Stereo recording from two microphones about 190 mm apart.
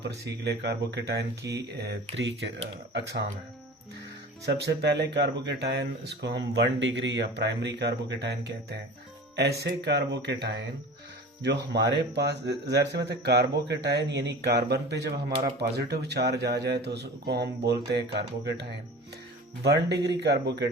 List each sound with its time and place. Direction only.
0.4 s speech: 60° right (ahead or behind)
4.4 s speech: 60° right (ahead or behind)
19.6 s speech: 60° right (ahead or behind)